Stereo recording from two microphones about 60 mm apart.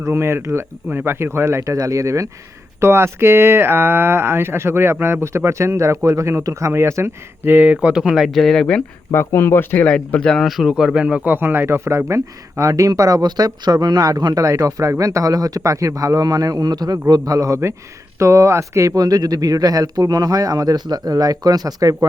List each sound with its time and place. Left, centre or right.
0.1 s speech: right
2.8 s speech: right
7.4 s speech: right
7.7 s speech: right
8.1 s speech: centre
9.1 s speech: left
9.8 s speech: left
10.3 s speech: centre
10.7 s speech: centre
11.3 s speech: right